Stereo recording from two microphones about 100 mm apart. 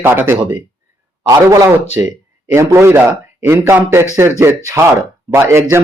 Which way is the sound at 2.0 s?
20° right (ahead or behind).